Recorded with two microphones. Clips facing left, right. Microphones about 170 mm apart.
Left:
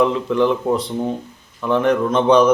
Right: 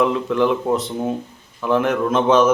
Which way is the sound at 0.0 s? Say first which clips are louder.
Left 1 dB; centre (ahead or behind).